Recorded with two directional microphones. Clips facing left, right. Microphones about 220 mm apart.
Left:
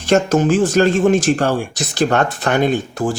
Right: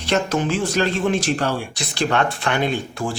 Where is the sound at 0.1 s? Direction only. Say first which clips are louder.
Left 7 dB; 45° left (ahead or behind).